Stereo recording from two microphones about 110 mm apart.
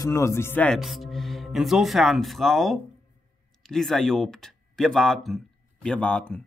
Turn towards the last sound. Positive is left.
turn(degrees=10)  # may be behind; listen again after turning